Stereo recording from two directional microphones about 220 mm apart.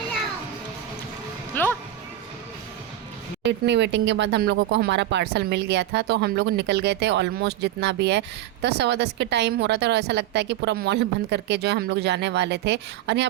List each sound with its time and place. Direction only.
1.6 s music: 10° left (ahead or behind)
3.4 s speech: 50° right (ahead or behind)